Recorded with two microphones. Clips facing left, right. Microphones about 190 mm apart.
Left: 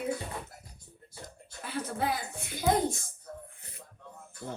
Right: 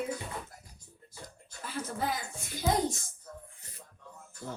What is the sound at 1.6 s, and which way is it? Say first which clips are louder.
Speech: left 2 dB; 60° left (ahead or behind).